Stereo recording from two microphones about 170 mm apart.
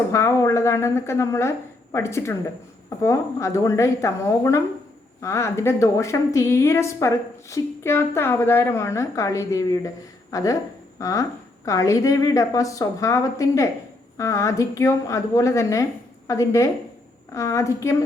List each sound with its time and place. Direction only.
0.1 s a woman's voice: 15° left (ahead or behind)